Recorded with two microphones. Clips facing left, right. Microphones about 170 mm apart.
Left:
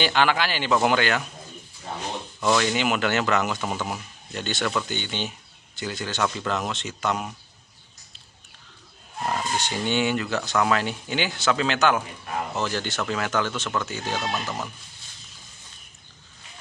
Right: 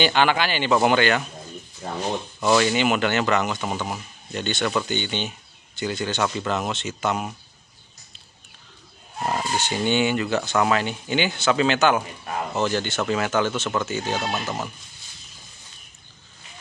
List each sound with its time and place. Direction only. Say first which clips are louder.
0.0 s speech: right 2 dB; centre (ahead or behind)
1.8 s a sound: right 4 dB; 50° right (ahead or behind)
2.4 s speech: right 3 dB; 5° right (ahead or behind)
9.6 s speech: right 4 dB; centre (ahead or behind)
14.2 s speech: right 2 dB; 20° right (ahead or behind)